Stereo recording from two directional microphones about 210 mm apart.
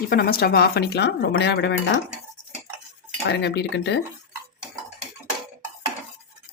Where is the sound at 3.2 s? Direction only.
55° left (ahead or behind).